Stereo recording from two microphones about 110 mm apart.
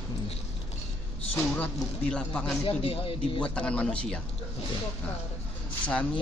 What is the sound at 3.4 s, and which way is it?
Speech, 10° left (ahead or behind).